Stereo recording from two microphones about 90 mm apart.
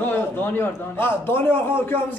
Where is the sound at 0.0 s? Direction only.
25° left (ahead or behind).